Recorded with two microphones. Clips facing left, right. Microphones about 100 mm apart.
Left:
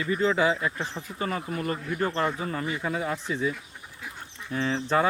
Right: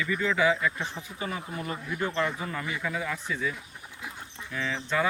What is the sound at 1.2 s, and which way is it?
Speech, 50° left (ahead or behind).